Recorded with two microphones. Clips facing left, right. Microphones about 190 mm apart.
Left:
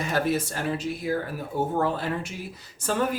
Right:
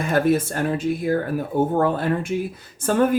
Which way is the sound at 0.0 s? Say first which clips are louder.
Right 6 dB; 50° right (ahead or behind).